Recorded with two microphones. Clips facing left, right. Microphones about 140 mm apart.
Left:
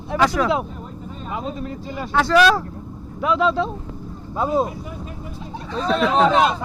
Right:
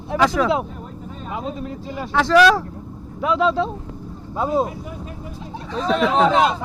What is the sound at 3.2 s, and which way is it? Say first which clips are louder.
Speech: even; 30° right (ahead or behind).